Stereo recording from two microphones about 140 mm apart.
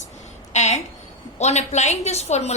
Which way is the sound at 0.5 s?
55° left (ahead or behind).